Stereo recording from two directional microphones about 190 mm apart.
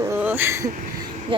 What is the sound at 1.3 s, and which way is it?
Speech, 25° right (ahead or behind).